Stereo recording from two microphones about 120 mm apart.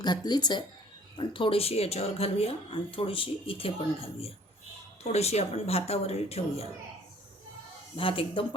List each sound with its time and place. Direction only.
0.0 s speech: 35° left (ahead or behind); by 6.7 s 60° left (ahead or behind)
7.9 s speech: 50° left (ahead or behind)